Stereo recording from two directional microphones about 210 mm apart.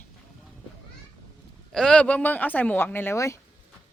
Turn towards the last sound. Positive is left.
turn(degrees=15)  # may be behind; listen again after turning